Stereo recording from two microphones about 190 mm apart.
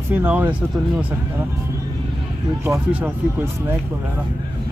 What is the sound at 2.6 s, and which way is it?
Speech, 10° right (ahead or behind).